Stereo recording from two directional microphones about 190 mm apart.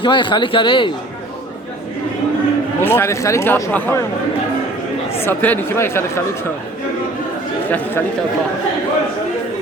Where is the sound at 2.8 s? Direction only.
10° left (ahead or behind).